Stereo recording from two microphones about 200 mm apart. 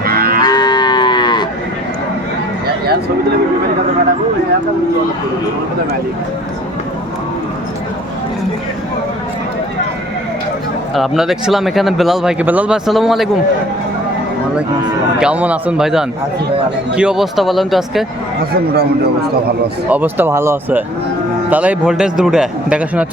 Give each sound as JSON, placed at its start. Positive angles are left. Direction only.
{"t": 0.0, "sound": "moo", "side_deg": -50}
{"t": 0.4, "sound": "moo", "side_deg": 20}
{"t": 10.9, "sound": "speech", "side_deg": 0}
{"t": 15.2, "sound": "speech", "side_deg": -5}
{"t": 18.3, "sound": "speech", "side_deg": -50}
{"t": 19.9, "sound": "speech", "side_deg": -10}